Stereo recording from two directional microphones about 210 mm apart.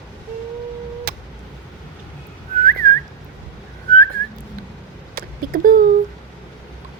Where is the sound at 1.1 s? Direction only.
50° right (ahead or behind).